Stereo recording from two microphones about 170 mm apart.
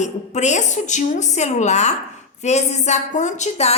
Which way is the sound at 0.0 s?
45° left (ahead or behind).